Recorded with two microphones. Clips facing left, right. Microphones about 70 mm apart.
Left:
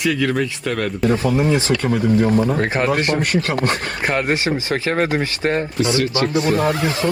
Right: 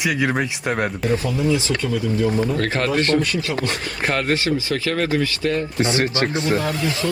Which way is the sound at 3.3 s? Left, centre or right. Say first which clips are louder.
Left 4 dB; left.